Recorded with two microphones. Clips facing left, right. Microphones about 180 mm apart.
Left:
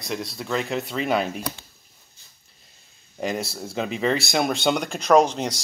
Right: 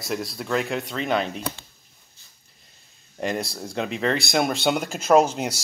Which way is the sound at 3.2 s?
Centre (ahead or behind).